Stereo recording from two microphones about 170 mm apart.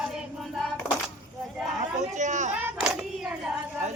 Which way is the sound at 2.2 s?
45° right (ahead or behind).